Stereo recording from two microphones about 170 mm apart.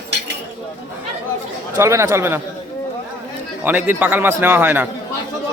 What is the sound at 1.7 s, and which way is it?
Speech, 15° right (ahead or behind).